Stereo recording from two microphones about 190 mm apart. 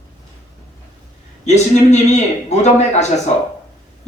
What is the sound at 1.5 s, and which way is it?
A man's voice, 35° left (ahead or behind).